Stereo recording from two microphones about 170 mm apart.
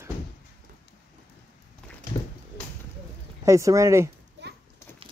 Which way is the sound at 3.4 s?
20° right (ahead or behind).